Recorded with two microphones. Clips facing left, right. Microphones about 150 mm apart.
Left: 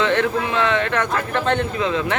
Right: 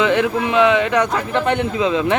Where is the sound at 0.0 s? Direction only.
15° right (ahead or behind).